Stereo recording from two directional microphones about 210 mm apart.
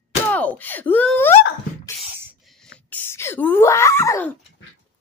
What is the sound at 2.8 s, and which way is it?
Speech, 10° left (ahead or behind).